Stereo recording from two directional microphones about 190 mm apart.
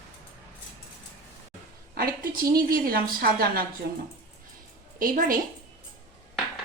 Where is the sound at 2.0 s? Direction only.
50° right (ahead or behind).